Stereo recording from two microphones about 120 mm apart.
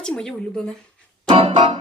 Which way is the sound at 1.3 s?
50° right (ahead or behind).